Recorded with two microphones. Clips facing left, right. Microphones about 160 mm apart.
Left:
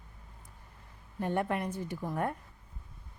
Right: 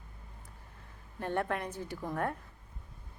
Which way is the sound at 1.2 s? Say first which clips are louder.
Left 2 dB; 10° left (ahead or behind).